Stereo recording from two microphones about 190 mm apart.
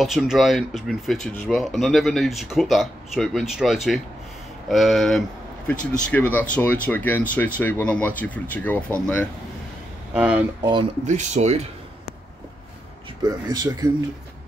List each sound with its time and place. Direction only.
0.0 s speech: centre (ahead or behind)
10.1 s speech: 5° right (ahead or behind)
10.6 s speech: 25° right (ahead or behind)
11.1 s speech: 40° right (ahead or behind)
13.2 s speech: 20° right (ahead or behind)